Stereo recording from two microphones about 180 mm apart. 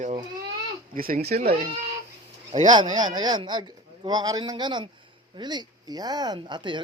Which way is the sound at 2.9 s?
25° right (ahead or behind).